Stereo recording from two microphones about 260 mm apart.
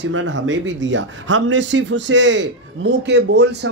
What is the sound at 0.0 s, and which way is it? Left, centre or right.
Speech, right.